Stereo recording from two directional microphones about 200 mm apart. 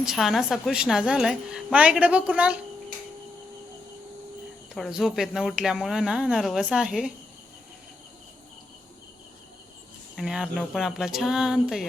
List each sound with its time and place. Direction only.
0.0 s a woman's voice: centre (ahead or behind)
4.7 s a woman's voice: centre (ahead or behind)
10.2 s a woman's voice: centre (ahead or behind)